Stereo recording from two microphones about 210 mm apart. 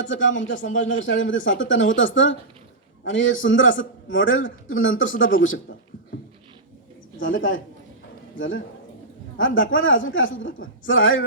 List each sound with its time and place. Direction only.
0.0 s a man's voice: 65° left (ahead or behind)
7.2 s a man's voice: 65° left (ahead or behind)